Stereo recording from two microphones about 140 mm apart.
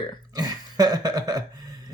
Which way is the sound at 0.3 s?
30° right (ahead or behind).